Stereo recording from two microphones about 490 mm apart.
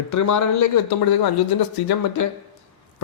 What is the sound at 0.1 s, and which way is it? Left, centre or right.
Speech, left.